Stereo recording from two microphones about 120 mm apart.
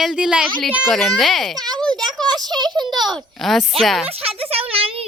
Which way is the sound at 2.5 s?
35° right (ahead or behind).